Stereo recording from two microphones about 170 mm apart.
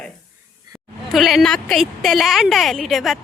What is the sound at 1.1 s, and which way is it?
Speech, centre (ahead or behind).